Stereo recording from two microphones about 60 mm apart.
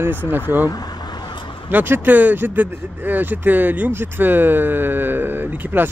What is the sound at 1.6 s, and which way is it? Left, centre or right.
Speech, right.